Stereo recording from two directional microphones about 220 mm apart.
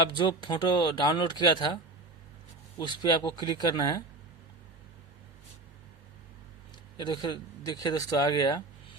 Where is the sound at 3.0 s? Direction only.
20° left (ahead or behind).